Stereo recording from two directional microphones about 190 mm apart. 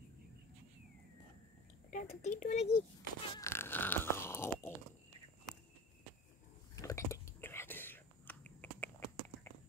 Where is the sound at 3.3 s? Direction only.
15° left (ahead or behind).